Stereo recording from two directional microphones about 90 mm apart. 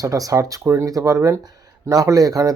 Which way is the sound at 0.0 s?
40° right (ahead or behind).